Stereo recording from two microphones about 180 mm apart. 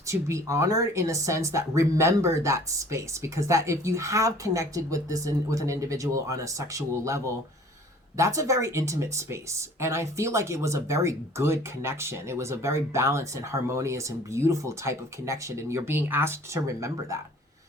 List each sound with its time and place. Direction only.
0.1 s speech: 15° right (ahead or behind)